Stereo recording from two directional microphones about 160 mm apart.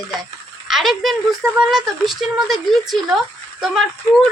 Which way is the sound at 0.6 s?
Centre (ahead or behind).